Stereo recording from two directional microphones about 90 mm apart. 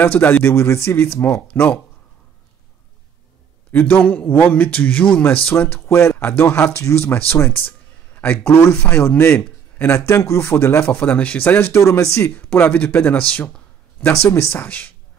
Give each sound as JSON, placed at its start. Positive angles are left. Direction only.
{"t": 0.0, "sound": "speech", "side_deg": 20}
{"t": 3.7, "sound": "speech", "side_deg": 20}
{"t": 11.8, "sound": "speech", "side_deg": 35}